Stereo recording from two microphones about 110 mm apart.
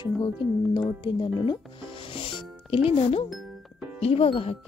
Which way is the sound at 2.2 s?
55° left (ahead or behind).